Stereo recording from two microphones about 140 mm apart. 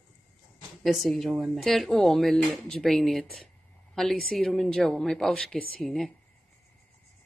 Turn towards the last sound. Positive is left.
turn(degrees=0)  # may be behind; listen again after turning